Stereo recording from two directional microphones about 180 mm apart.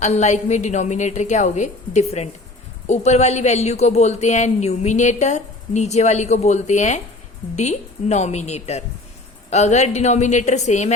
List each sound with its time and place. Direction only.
0.0 s speech: 40° left (ahead or behind)